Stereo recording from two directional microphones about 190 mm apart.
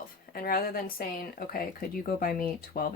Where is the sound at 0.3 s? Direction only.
50° left (ahead or behind).